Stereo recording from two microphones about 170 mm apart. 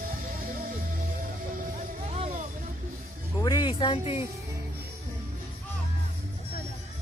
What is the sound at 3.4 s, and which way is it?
Speech, 25° left (ahead or behind).